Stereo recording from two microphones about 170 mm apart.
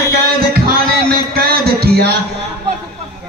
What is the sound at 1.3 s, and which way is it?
Music, 65° right (ahead or behind).